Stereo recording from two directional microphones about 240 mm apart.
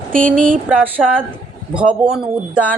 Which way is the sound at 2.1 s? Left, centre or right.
Centre.